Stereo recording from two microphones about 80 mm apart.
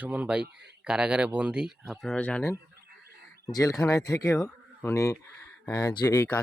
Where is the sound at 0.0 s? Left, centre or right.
Centre.